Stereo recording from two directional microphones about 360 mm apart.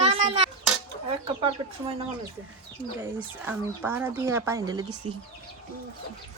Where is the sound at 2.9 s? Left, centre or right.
Centre.